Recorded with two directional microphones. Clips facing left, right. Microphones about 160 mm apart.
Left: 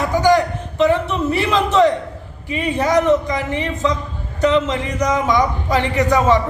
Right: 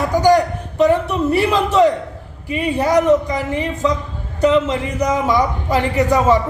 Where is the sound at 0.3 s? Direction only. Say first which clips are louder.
Right 2 dB; 40° right (ahead or behind).